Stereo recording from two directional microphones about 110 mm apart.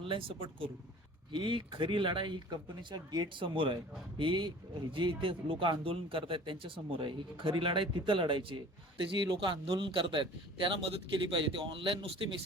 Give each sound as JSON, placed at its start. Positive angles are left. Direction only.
{"t": 0.0, "sound": "speech", "side_deg": -55}